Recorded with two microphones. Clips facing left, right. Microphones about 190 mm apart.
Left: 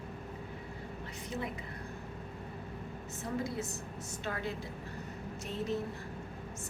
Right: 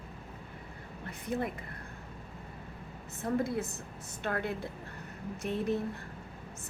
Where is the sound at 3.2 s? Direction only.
55° right (ahead or behind).